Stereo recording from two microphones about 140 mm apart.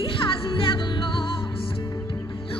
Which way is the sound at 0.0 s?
40° left (ahead or behind).